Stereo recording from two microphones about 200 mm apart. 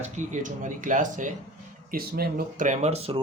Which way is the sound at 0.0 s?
35° right (ahead or behind).